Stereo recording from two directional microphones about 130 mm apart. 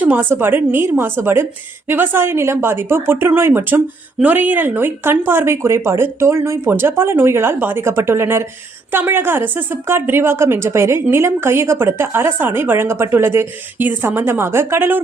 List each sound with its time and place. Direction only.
0.0 s speech: 15° right (ahead or behind)